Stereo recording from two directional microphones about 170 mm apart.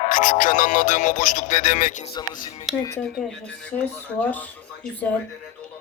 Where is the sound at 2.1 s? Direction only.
25° left (ahead or behind).